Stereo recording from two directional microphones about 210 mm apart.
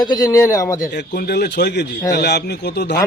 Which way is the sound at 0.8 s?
50° left (ahead or behind).